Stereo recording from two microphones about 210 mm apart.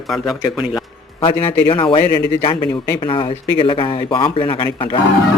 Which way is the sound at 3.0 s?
25° left (ahead or behind).